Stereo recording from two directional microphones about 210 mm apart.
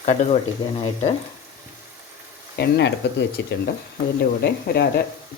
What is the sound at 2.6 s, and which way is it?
Speech, 55° left (ahead or behind).